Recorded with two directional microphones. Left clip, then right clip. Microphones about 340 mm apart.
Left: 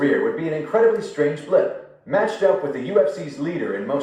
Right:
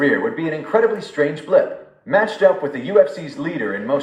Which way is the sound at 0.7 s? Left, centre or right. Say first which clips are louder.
Right 1 dB; right.